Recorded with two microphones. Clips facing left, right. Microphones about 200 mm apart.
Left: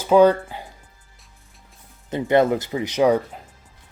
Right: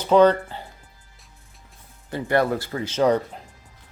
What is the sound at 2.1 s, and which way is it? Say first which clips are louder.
Speech: left 4 dB; 20° left (ahead or behind).